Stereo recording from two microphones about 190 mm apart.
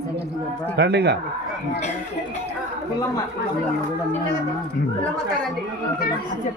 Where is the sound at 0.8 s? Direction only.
60° right (ahead or behind).